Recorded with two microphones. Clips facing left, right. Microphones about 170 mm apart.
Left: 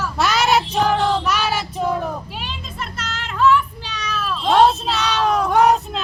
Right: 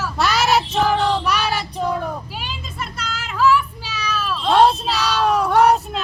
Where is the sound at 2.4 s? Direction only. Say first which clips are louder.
Even; centre (ahead or behind).